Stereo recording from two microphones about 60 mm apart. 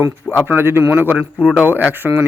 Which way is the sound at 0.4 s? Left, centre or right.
Right.